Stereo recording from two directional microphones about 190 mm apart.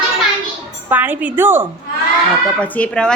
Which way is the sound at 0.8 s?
10° right (ahead or behind).